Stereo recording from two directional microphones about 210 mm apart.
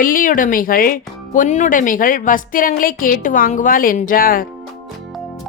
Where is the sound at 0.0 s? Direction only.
40° left (ahead or behind).